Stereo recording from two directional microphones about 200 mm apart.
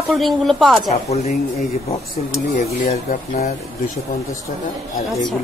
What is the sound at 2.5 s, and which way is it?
Speech, 35° left (ahead or behind).